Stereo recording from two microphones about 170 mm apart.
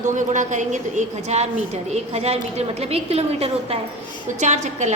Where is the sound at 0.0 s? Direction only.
45° right (ahead or behind).